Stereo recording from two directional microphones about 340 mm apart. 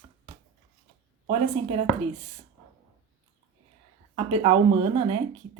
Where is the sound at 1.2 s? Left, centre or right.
Centre.